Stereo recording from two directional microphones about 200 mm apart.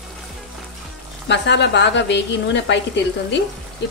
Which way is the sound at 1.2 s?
60° left (ahead or behind).